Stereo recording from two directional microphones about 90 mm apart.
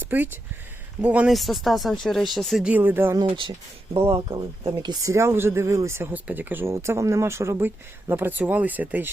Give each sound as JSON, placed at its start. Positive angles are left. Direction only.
{"t": 0.0, "sound": "speech", "side_deg": -20}
{"t": 1.3, "sound": "speech", "side_deg": 0}
{"t": 2.6, "sound": "speech", "side_deg": -20}
{"t": 3.2, "sound": "speech", "side_deg": -65}
{"t": 4.4, "sound": "speech", "side_deg": -55}
{"t": 5.0, "sound": "speech", "side_deg": -30}